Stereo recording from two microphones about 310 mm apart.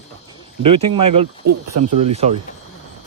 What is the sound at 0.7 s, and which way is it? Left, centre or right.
Speech, centre.